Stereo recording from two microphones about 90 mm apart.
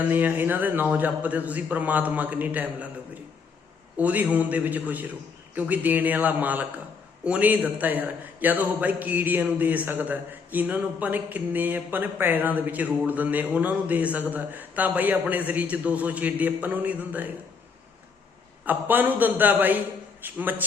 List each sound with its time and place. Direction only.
0.1 s a man's voice: 20° right (ahead or behind)
3.9 s a man's voice: 20° right (ahead or behind)
18.6 s a man's voice: 20° right (ahead or behind)